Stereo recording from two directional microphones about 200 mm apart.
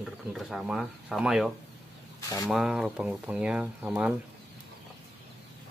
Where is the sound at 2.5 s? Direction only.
Centre (ahead or behind).